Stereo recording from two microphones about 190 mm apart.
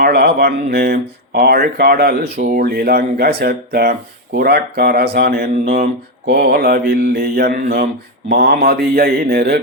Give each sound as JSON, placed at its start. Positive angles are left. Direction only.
{"t": 0.0, "sound": "speech", "side_deg": -60}